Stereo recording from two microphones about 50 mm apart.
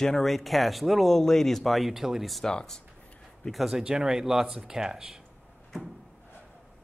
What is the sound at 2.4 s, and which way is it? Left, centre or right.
Speech, centre.